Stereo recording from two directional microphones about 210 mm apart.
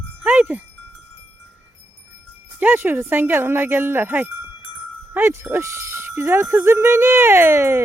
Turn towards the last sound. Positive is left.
turn(degrees=-15)  # may be behind; listen again after turning